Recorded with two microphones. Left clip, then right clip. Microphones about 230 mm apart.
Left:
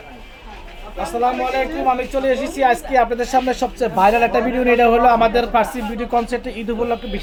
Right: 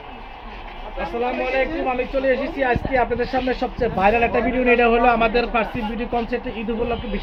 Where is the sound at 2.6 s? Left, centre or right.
Centre.